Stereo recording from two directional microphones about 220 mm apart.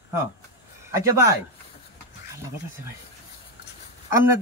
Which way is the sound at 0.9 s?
15° right (ahead or behind).